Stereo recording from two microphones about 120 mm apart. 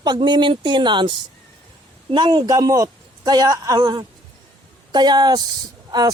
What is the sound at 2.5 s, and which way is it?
A man's voice, 30° right (ahead or behind).